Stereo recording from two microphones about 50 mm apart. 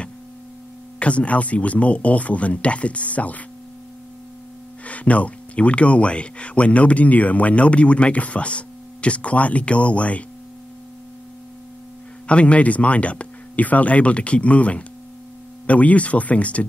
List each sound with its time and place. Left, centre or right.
0.9 s speech: left
4.8 s speech: left
12.3 s speech: left